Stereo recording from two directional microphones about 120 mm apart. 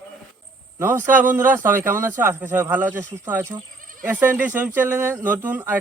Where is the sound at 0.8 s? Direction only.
20° right (ahead or behind).